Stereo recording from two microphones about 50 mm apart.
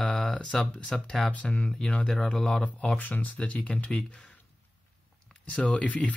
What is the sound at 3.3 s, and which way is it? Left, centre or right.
Speech, left.